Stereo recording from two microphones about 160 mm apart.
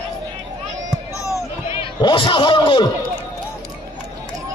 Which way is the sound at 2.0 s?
30° left (ahead or behind).